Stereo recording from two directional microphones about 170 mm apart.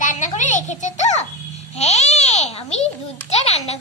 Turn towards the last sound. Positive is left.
turn(degrees=40)  # may be behind; listen again after turning